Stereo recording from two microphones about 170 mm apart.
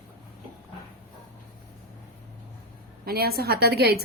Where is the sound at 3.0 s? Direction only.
65° right (ahead or behind).